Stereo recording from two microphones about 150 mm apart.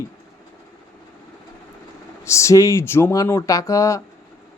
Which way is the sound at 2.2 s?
20° left (ahead or behind).